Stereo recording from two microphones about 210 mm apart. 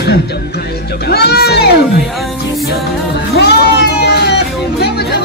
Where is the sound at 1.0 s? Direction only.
50° left (ahead or behind).